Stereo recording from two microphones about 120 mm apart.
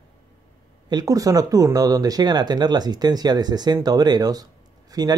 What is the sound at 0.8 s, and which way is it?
Speech, 30° right (ahead or behind).